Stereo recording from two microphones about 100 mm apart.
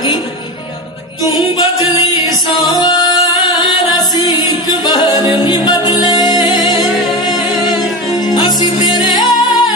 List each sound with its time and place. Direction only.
2.2 s music: 40° left (ahead or behind)
7.0 s music: centre (ahead or behind)
8.7 s music: 45° left (ahead or behind)